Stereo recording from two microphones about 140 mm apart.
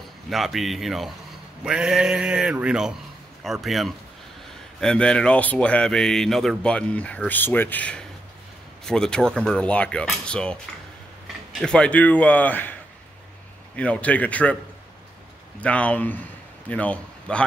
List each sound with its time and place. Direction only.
0.3 s a man's voice: centre (ahead or behind)
11.6 s speech: 5° left (ahead or behind)
13.7 s speech: 10° left (ahead or behind)
15.6 s a man's voice: 10° left (ahead or behind)